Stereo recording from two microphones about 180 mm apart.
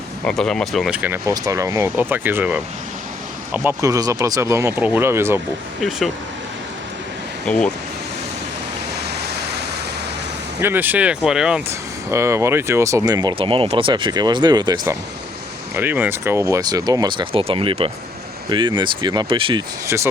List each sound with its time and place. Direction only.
0.3 s speech: 5° left (ahead or behind); by 5.4 s 15° right (ahead or behind)
7.4 s speech: 5° left (ahead or behind)
9.0 s a sound: 65° right (ahead or behind)
10.6 s speech: 10° right (ahead or behind)
12.1 s speech: 15° right (ahead or behind)
15.7 s speech: 10° right (ahead or behind); by 19.6 s 30° right (ahead or behind)
19.9 s speech: 10° right (ahead or behind)